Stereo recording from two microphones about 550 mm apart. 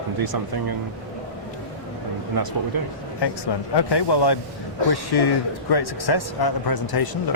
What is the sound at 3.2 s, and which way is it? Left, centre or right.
Speech, left.